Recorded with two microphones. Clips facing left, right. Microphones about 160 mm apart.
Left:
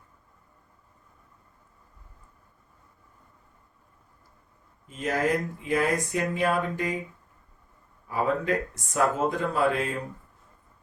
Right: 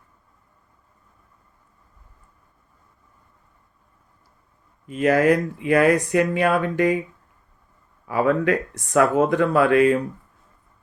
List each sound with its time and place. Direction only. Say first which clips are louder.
4.9 s speech: right 9 dB; 75° right (ahead or behind)
8.0 s speech: right 7 dB; 75° right (ahead or behind)